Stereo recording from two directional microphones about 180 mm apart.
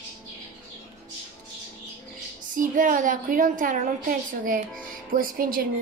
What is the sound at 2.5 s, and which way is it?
A woman's voice, 50° right (ahead or behind).